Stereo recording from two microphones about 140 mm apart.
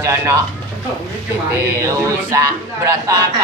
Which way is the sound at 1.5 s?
20° right (ahead or behind).